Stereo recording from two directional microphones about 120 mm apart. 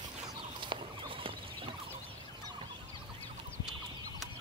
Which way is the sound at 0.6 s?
45° right (ahead or behind).